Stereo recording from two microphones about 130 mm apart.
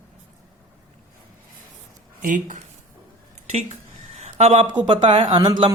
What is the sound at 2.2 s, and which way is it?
Speech, 80° right.